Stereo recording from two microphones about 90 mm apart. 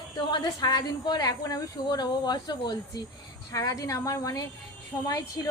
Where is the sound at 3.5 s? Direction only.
40° left (ahead or behind).